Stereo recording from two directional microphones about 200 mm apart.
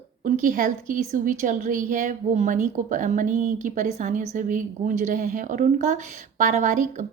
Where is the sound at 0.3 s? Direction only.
40° right (ahead or behind).